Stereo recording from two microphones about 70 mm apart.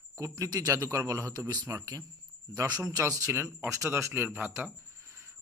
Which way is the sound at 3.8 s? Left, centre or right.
Right.